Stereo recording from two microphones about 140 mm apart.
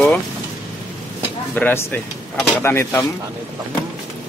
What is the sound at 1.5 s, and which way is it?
Speech, 10° left (ahead or behind).